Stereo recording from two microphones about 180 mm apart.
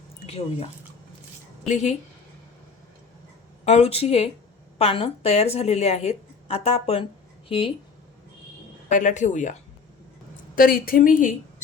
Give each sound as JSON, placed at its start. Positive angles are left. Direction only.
{"t": 1.6, "sound": "a woman's voice", "side_deg": 40}
{"t": 3.6, "sound": "a woman's voice", "side_deg": 35}
{"t": 8.9, "sound": "speech", "side_deg": 45}
{"t": 10.5, "sound": "speech", "side_deg": 55}